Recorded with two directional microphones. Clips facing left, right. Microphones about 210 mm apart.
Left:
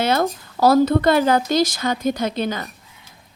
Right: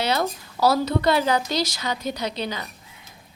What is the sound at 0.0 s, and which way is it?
Speech, 50° left (ahead or behind).